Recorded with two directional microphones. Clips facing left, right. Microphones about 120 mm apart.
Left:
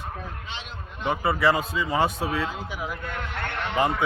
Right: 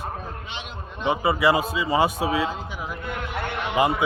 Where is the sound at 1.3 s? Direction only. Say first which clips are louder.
Right 1 dB; 5° right (ahead or behind).